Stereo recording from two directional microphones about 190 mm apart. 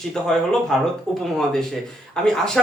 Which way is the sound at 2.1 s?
5° left (ahead or behind).